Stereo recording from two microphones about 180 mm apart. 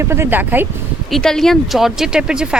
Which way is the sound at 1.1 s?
Centre (ahead or behind).